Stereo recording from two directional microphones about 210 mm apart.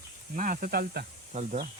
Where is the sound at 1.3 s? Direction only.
35° right (ahead or behind).